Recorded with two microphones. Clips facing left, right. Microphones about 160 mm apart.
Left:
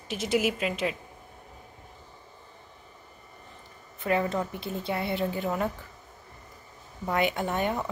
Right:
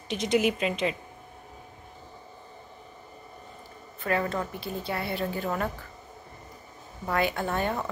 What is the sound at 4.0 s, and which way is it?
A woman's voice, 20° left (ahead or behind).